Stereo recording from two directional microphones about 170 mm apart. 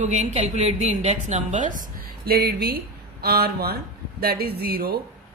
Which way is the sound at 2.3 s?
70° right (ahead or behind).